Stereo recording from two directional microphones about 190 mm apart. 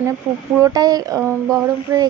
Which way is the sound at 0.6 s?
20° right (ahead or behind).